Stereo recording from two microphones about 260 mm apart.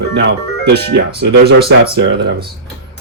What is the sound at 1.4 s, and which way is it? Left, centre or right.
Speech, right.